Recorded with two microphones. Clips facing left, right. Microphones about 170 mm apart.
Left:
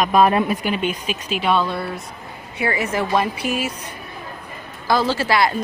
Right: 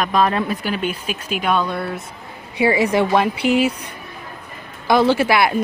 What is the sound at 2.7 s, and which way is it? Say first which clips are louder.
Speech: right 5 dB; 15° right (ahead or behind).